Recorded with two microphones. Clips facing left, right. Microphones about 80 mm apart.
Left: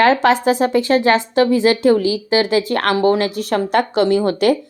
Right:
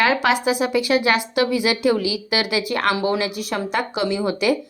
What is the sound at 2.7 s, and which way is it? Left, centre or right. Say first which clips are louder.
Speech: left 5 dB; left.